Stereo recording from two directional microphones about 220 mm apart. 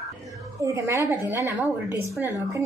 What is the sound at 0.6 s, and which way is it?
A woman's voice, 15° right (ahead or behind).